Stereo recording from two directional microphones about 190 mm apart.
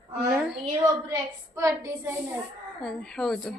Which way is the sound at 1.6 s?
15° right (ahead or behind).